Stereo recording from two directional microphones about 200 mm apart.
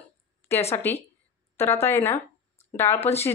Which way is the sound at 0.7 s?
10° left (ahead or behind).